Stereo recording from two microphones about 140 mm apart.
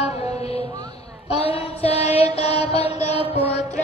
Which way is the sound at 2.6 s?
45° left (ahead or behind).